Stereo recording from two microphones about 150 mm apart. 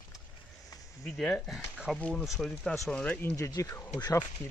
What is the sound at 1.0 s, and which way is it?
Speech, 5° left (ahead or behind).